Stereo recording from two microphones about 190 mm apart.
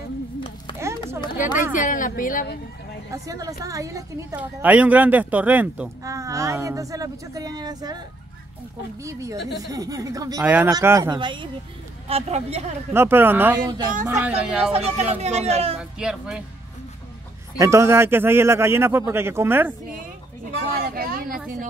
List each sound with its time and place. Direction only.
1.6 s a woman's voice: 45° left (ahead or behind)
3.1 s speech: 20° right (ahead or behind)
9.0 s speech: 15° right (ahead or behind); by 12.6 s 35° right (ahead or behind)
12.9 s speech: 10° right (ahead or behind)
14.7 s speech: 35° right (ahead or behind)
15.8 s speech: 5° right (ahead or behind)
17.6 s speech: 15° right (ahead or behind)
20.5 s vehicle: 50° right (ahead or behind)